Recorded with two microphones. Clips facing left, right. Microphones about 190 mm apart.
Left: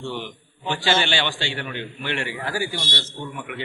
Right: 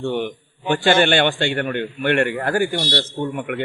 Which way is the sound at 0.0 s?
55° right (ahead or behind).